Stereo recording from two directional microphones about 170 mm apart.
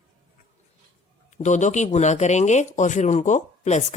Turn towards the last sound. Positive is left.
turn(degrees=45)  # may be behind; listen again after turning